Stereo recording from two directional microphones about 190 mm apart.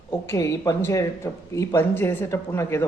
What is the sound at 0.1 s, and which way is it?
Speech, 15° left (ahead or behind).